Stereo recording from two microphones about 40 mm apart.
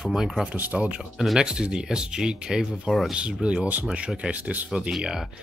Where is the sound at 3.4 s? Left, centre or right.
Right.